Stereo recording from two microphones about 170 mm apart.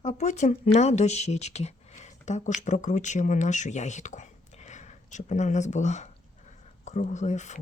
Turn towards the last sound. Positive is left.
turn(degrees=45)  # may be behind; listen again after turning